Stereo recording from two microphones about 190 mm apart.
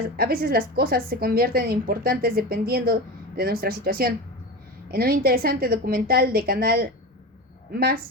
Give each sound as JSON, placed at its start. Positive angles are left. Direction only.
{"t": 0.2, "sound": "a woman's voice", "side_deg": -50}